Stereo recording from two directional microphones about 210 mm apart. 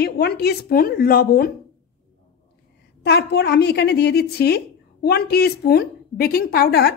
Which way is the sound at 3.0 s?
55° left (ahead or behind).